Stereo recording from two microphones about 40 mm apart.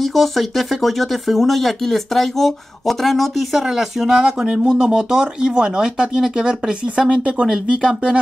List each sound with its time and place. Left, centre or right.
0.0 s speech: centre
3.6 s speech: centre